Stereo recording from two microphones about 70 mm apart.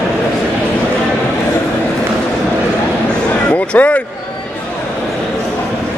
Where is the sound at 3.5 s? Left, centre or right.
Left.